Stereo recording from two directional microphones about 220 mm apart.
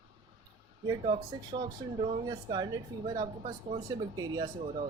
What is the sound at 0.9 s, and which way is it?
A woman's voice, 25° right (ahead or behind).